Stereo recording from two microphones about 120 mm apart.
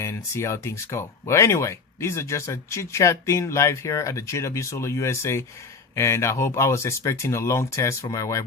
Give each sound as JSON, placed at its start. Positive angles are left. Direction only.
{"t": 0.0, "sound": "speech", "side_deg": 25}